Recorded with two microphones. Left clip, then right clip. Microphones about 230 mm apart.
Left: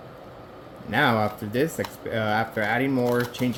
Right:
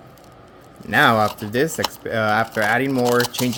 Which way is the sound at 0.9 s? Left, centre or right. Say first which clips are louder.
Right 7 dB; right.